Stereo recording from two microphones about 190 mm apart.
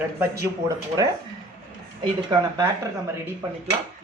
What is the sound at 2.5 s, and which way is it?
Speech, 15° right (ahead or behind).